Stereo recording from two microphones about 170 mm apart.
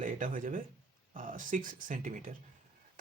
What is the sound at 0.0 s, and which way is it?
Speech, 50° right (ahead or behind).